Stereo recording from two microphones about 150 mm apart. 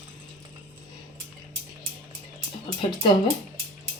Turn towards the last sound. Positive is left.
turn(degrees=30)  # may be behind; listen again after turning